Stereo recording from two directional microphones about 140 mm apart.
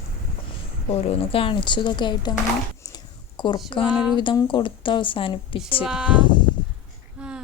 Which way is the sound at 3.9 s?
5° right (ahead or behind).